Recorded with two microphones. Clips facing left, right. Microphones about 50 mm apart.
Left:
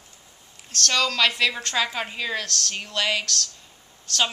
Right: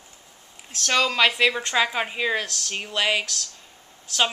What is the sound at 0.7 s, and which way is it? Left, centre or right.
A woman's voice, centre.